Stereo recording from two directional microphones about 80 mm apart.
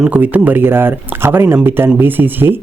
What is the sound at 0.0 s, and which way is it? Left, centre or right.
Speech, centre.